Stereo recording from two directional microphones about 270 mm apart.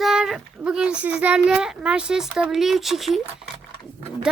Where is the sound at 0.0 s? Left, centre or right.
Centre.